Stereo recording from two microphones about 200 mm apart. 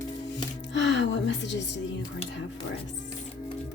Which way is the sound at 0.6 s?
65° left (ahead or behind).